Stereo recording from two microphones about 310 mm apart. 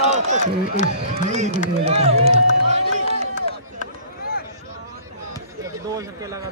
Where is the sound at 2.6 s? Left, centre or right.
Right.